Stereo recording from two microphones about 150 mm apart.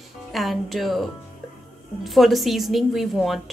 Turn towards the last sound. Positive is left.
turn(degrees=0)  # may be behind; listen again after turning